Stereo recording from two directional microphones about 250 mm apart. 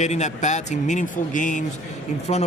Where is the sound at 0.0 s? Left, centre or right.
Left.